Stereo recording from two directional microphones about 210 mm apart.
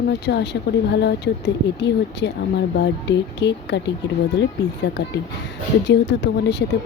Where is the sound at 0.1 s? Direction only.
55° left (ahead or behind).